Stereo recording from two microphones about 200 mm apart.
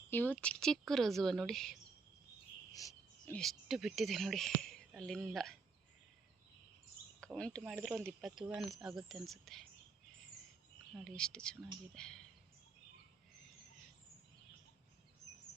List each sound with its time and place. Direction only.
0.1 s speech: 10° left (ahead or behind)
2.7 s a sound: 15° left (ahead or behind)
3.3 s speech: centre (ahead or behind)
7.3 s speech: 5° left (ahead or behind)
11.0 s speech: 5° left (ahead or behind)